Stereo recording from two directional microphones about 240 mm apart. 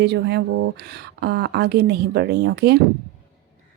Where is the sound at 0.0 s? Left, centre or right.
Right.